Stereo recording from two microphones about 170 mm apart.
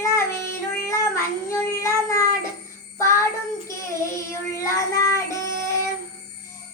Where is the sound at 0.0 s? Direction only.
15° left (ahead or behind).